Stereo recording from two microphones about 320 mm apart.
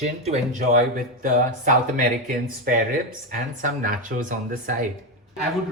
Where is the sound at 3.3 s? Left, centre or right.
Right.